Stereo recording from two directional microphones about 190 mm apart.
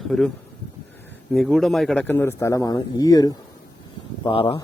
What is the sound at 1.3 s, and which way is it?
Speech, centre (ahead or behind).